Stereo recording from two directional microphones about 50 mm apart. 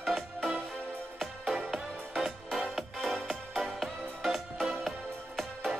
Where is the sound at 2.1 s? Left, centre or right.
Centre.